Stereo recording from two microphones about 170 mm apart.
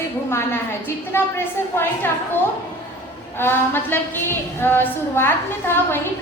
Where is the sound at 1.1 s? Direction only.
10° left (ahead or behind).